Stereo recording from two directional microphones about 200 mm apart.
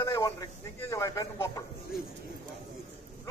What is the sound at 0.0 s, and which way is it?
A man's voice, 15° left (ahead or behind).